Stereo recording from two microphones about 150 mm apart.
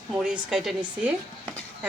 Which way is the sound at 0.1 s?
5° right (ahead or behind).